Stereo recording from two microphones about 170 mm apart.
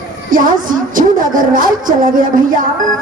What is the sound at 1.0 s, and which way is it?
A woman's voice, 55° right (ahead or behind).